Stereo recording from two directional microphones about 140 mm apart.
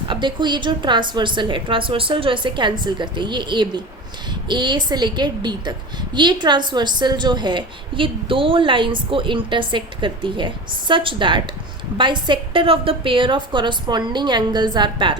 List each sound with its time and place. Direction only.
0.1 s a woman's voice: 35° right (ahead or behind)